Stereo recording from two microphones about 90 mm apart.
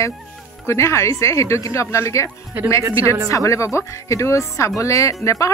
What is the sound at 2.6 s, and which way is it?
Speech, 20° right (ahead or behind).